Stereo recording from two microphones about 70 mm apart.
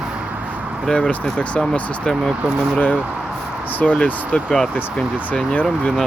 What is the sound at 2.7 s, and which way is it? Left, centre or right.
Speech, left.